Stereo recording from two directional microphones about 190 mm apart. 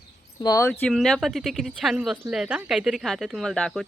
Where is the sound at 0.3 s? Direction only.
20° left (ahead or behind).